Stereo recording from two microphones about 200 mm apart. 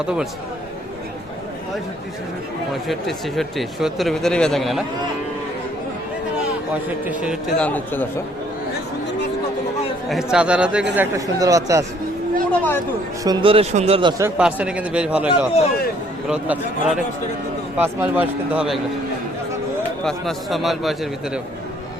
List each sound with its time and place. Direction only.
0.0 s speech: 5° right (ahead or behind)
2.8 s speech: centre (ahead or behind)
7.1 s speech: 5° right (ahead or behind)
7.6 s speech: 10° left (ahead or behind)
10.3 s a man's voice: 5° right (ahead or behind)
12.5 s speech: 10° left (ahead or behind)
13.2 s a man's voice: 25° right (ahead or behind); by 15.3 s 5° right (ahead or behind)
16.3 s a man's voice: 5° right (ahead or behind)
20.1 s speech: centre (ahead or behind)